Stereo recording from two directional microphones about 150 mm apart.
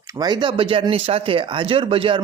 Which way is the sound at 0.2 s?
30° right (ahead or behind).